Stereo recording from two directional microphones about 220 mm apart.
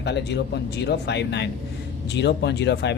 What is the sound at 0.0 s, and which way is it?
Speech, 50° left (ahead or behind).